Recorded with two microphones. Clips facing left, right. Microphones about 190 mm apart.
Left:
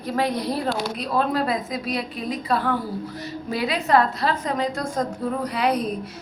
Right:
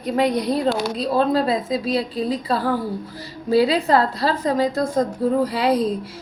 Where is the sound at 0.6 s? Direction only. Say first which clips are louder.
Right 5 dB; 30° right (ahead or behind).